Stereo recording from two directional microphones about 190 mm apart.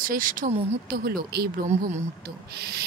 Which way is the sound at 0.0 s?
45° right (ahead or behind).